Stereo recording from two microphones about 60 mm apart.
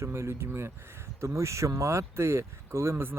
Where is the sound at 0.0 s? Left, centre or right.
Right.